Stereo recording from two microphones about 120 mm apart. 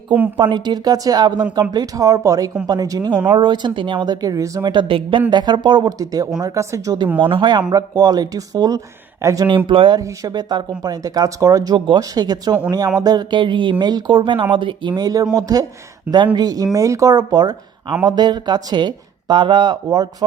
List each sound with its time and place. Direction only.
0.3 s speech: 40° right (ahead or behind)
7.2 s speech: 45° right (ahead or behind)
7.7 s speech: 30° right (ahead or behind)
9.6 s speech: 40° right (ahead or behind)